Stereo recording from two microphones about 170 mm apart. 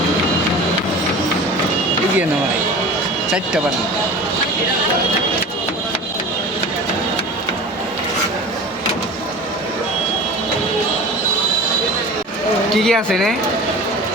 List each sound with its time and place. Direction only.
12.7 s speech: centre (ahead or behind)